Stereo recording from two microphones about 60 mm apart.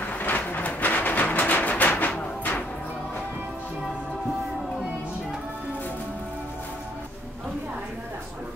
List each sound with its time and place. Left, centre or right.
0.2 s music: left